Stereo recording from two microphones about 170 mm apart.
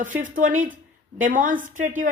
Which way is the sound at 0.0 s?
50° right (ahead or behind).